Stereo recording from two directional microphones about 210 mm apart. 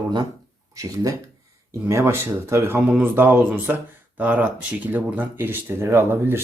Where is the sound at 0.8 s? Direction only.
15° right (ahead or behind).